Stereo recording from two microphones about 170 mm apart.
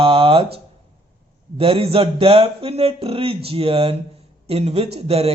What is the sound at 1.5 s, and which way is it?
A man's voice, 35° right (ahead or behind).